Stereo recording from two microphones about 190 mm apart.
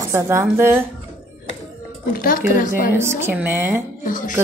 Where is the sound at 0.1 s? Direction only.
15° right (ahead or behind).